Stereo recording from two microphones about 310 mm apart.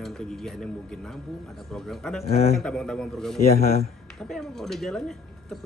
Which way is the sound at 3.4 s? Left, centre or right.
Left.